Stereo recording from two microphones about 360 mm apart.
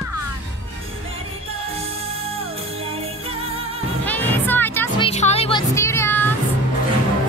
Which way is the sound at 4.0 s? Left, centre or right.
Centre.